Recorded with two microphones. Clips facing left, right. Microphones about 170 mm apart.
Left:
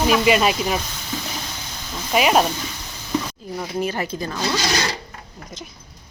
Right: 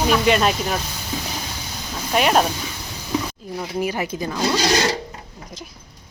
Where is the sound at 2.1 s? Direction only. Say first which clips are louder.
Left 1 dB; 5° left (ahead or behind).